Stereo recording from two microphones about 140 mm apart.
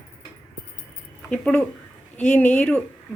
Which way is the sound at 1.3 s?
10° left (ahead or behind).